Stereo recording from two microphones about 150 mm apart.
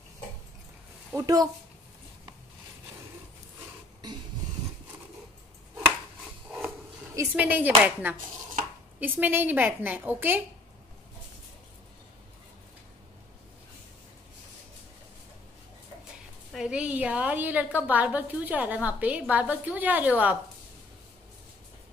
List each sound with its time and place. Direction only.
1.1 s speech: 25° right (ahead or behind)
7.3 s a woman's voice: 10° right (ahead or behind)
16.5 s a woman's voice: 5° right (ahead or behind)